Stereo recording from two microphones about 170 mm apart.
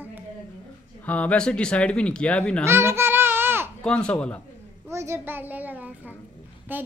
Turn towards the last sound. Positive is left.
turn(degrees=-10)  # may be behind; listen again after turning